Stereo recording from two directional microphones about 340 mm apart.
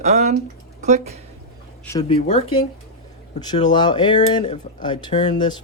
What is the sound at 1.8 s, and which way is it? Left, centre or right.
Speech, centre.